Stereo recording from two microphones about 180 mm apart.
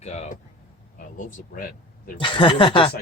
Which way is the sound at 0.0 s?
40° left (ahead or behind).